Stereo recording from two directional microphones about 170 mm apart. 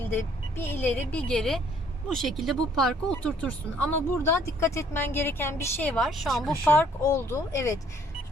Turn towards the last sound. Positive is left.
turn(degrees=20)  # may be behind; listen again after turning